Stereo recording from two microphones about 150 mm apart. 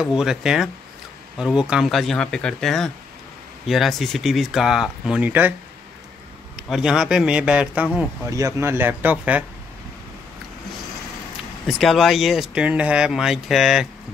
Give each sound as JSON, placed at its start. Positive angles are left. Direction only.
{"t": 0.0, "sound": "speech", "side_deg": -5}
{"t": 6.7, "sound": "a man's voice", "side_deg": -5}
{"t": 8.3, "sound": "a man's voice", "side_deg": -20}
{"t": 11.6, "sound": "speech", "side_deg": 0}